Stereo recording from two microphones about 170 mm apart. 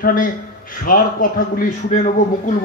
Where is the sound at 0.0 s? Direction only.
55° left (ahead or behind).